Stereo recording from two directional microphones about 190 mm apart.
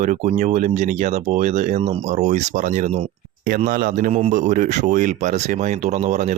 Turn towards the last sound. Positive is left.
turn(degrees=-40)  # may be behind; listen again after turning